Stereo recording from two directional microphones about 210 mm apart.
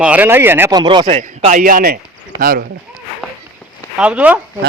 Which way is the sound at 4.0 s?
5° right (ahead or behind).